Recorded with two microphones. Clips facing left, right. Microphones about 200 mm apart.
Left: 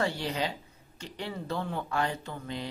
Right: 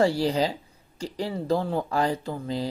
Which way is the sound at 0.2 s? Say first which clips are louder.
Right 8 dB; 35° right (ahead or behind).